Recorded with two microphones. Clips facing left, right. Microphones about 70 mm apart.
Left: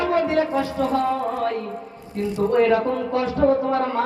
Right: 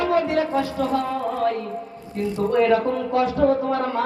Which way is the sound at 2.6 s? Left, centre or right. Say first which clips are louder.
Even; left.